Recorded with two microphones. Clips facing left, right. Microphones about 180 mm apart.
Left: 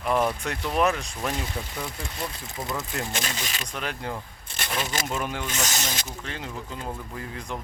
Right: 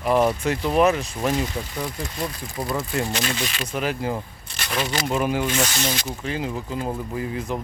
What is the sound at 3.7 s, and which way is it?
Speech, 5° right (ahead or behind).